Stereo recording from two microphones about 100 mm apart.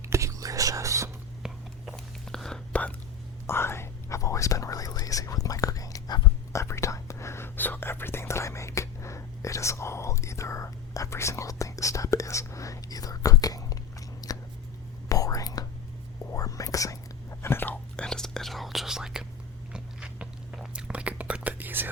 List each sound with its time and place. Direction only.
0.0 s whispering: 30° right (ahead or behind)
2.2 s whispering: 5° left (ahead or behind)
3.4 s whispering: 25° left (ahead or behind)
6.5 s whispering: 30° left (ahead or behind)
14.2 s scissors: 40° left (ahead or behind)
15.1 s whispering: 35° left (ahead or behind)
17.4 s whispering: 20° left (ahead or behind)
18.0 s whispering: 5° left (ahead or behind)
19.7 s biting: 10° right (ahead or behind)